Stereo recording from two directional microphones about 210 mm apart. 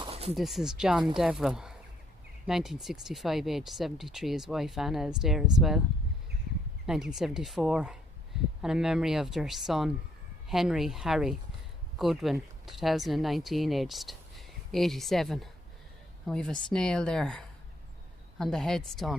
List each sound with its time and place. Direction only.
0.0 s a sound: 30° right (ahead or behind)
0.3 s speech: centre (ahead or behind)
6.8 s speech: centre (ahead or behind)